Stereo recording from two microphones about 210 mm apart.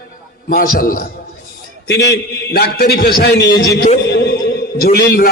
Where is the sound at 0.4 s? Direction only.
45° left (ahead or behind).